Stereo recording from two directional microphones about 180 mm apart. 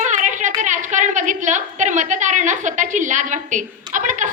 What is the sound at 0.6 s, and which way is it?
A woman's voice, 45° right (ahead or behind).